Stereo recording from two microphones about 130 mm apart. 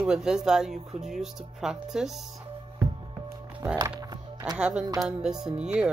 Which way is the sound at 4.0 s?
30° right (ahead or behind).